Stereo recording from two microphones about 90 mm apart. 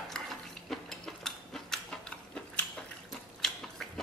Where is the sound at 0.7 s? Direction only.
5° left (ahead or behind).